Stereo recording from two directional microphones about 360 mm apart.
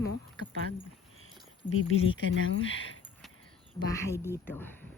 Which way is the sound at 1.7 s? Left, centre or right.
Left.